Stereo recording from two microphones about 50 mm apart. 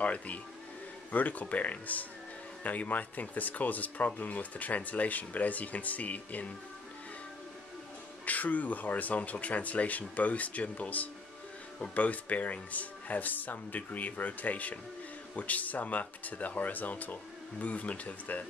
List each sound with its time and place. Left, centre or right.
0.0 s speech: left
8.3 s speech: left